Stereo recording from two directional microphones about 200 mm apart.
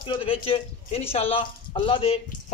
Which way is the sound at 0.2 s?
30° left (ahead or behind).